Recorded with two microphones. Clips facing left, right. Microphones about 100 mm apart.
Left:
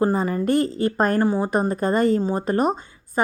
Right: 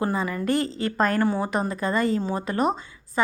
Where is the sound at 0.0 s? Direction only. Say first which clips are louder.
Left 5 dB; 40° left (ahead or behind).